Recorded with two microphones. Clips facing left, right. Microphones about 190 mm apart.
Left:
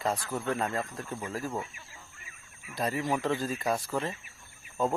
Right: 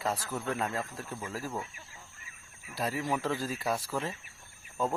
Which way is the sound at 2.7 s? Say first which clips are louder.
Left 2 dB; centre (ahead or behind).